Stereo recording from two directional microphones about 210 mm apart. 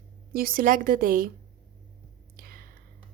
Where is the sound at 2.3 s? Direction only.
45° right (ahead or behind).